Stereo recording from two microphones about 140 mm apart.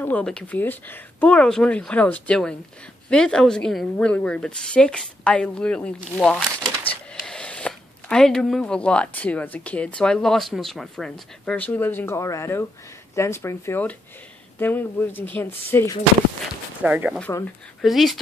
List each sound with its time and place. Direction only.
0.0 s speech: 10° left (ahead or behind)
16.8 s speech: 10° right (ahead or behind)